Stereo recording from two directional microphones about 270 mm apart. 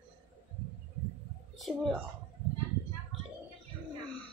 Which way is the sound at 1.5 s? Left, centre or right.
Centre.